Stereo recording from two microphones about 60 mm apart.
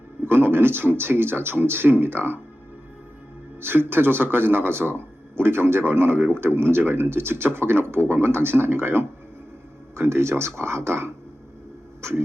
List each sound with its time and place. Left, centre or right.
0.3 s speech: right
3.6 s speech: right